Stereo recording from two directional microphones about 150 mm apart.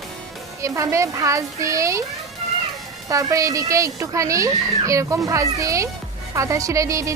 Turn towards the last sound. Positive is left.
turn(degrees=-20)  # may be behind; listen again after turning